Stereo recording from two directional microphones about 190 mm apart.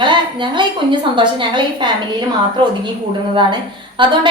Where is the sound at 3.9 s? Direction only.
25° right (ahead or behind).